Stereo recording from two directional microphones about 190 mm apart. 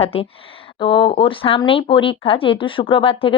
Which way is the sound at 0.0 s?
30° left (ahead or behind).